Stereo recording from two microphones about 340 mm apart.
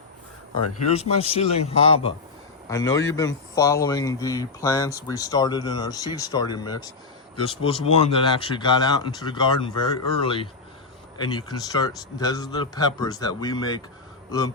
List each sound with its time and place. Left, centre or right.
0.9 s a man's voice: centre